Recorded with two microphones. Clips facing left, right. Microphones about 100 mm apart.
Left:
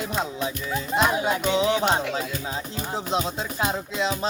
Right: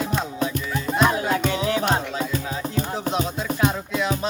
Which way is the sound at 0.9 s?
20° left (ahead or behind).